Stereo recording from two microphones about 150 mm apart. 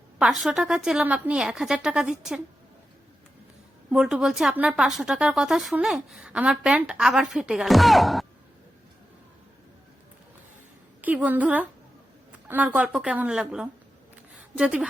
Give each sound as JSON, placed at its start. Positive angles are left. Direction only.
{"t": 0.2, "sound": "a woman's voice", "side_deg": 0}
{"t": 3.8, "sound": "a woman's voice", "side_deg": -5}
{"t": 11.0, "sound": "a woman's voice", "side_deg": -10}